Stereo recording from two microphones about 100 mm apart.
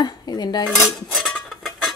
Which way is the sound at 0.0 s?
45° left (ahead or behind).